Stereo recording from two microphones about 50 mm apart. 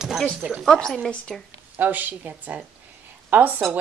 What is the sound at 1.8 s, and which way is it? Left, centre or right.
Speech, right.